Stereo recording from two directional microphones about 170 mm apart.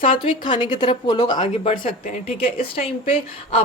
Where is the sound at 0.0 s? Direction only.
30° left (ahead or behind).